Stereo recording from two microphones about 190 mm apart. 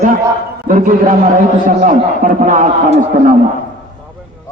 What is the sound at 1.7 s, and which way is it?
A man's voice, 45° right (ahead or behind).